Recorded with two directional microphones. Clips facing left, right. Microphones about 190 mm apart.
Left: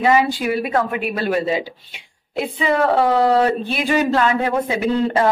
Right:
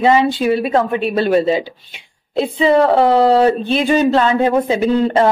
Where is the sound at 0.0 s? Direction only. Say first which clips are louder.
Right 4 dB; 25° right (ahead or behind).